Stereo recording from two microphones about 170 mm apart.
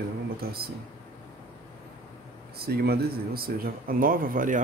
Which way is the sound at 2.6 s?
65° right (ahead or behind).